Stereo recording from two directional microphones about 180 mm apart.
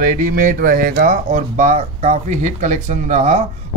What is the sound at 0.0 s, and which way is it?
Speech, 45° right (ahead or behind).